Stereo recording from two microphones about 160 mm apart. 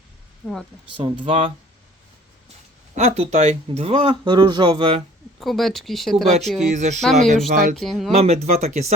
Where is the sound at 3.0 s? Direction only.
40° right (ahead or behind).